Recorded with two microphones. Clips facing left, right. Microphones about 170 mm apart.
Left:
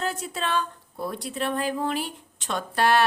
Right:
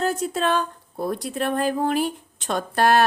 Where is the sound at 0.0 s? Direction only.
40° right (ahead or behind).